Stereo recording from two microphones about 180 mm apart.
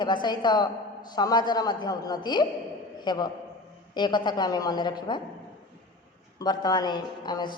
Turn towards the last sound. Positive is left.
turn(degrees=25)  # may be behind; listen again after turning